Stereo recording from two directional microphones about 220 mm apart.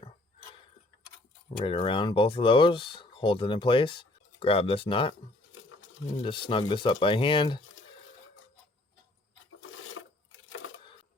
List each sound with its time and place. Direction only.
1.6 s speech: 25° left (ahead or behind)
6.5 s speech: 20° left (ahead or behind)
9.5 s filing: 65° left (ahead or behind)